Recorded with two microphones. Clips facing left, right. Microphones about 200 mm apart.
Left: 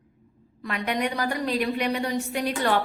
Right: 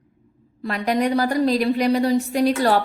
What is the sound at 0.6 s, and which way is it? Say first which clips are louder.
A woman's voice: right 6 dB; 35° right (ahead or behind).